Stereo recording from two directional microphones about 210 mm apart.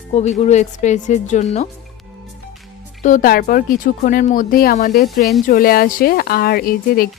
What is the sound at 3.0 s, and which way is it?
A woman's voice, 40° left (ahead or behind).